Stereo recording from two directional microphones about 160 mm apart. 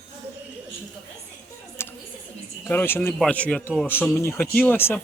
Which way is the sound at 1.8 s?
15° left (ahead or behind).